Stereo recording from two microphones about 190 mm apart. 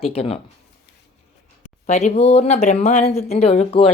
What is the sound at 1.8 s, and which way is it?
Speech, 40° left (ahead or behind).